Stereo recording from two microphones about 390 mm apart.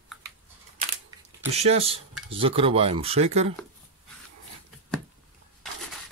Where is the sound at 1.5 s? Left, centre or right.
Centre.